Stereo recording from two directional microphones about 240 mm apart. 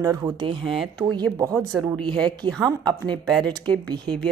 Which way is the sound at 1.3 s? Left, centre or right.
Centre.